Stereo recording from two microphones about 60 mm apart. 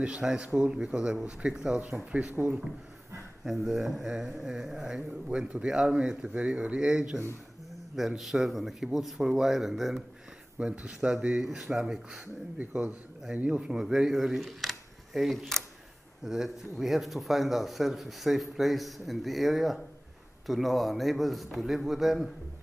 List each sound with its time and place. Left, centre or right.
0.2 s speech: centre
3.4 s speech: centre
8.2 s speech: centre
10.6 s speech: centre
12.5 s speech: centre
13.7 s speech: centre
16.3 s speech: centre